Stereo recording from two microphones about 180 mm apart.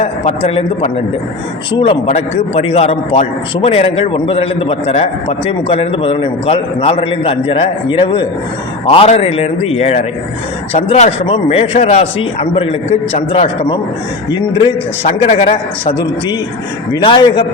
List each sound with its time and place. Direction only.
0.0 s a man's voice: 35° left (ahead or behind)